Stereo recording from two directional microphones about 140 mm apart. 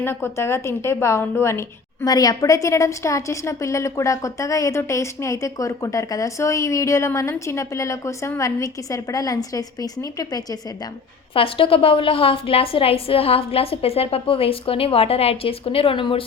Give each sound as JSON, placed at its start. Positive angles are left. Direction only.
{"t": 0.0, "sound": "a woman's voice", "side_deg": 15}
{"t": 11.3, "sound": "a woman's voice", "side_deg": 40}